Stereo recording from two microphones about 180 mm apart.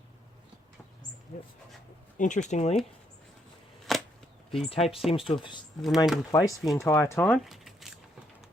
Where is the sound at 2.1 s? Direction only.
45° left (ahead or behind).